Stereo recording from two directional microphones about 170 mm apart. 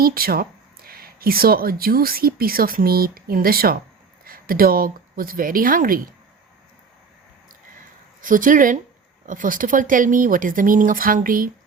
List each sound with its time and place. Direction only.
0.0 s a woman's voice: 60° right (ahead or behind)
8.2 s speech: 50° right (ahead or behind)